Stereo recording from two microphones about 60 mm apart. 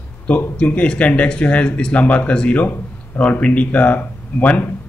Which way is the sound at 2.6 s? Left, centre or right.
Left.